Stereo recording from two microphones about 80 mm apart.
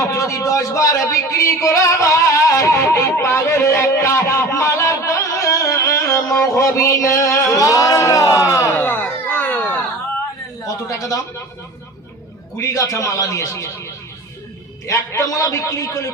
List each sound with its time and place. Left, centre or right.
0.0 s speech: left
8.8 s a sound: left
10.6 s speech: left
12.5 s a man's voice: left